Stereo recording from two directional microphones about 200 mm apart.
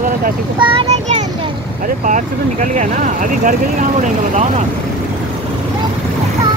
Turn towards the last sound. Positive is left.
turn(degrees=-35)  # may be behind; listen again after turning